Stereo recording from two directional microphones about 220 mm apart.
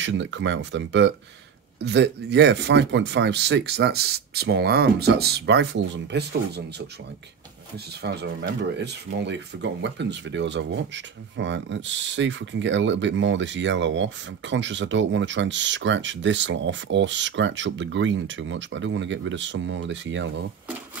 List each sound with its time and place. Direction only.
0.0 s speech: 55° right (ahead or behind)
8.0 s speech: 50° right (ahead or behind)